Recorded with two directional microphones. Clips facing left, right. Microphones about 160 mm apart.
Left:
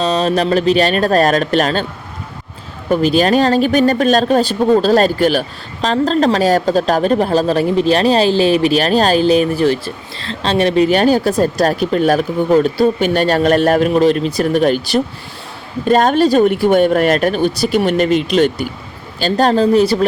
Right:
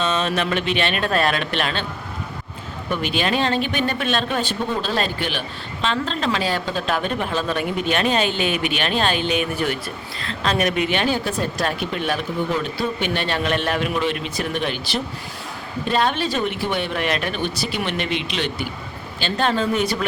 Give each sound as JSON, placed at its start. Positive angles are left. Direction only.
{"t": 0.0, "sound": "speech", "side_deg": 35}
{"t": 2.9, "sound": "speech", "side_deg": 40}